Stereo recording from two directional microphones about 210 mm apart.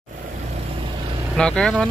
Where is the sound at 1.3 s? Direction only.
5° left (ahead or behind).